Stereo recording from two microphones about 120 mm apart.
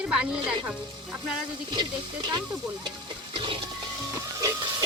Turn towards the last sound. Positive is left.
turn(degrees=-30)  # may be behind; listen again after turning